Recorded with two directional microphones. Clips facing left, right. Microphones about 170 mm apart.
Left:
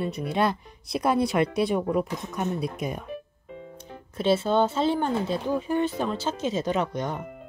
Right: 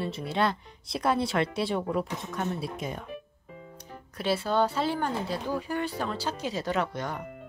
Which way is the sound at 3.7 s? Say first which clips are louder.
Left 6 dB; 25° left (ahead or behind).